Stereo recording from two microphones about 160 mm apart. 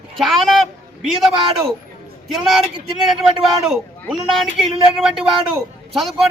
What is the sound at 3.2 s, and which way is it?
A man's voice, centre (ahead or behind).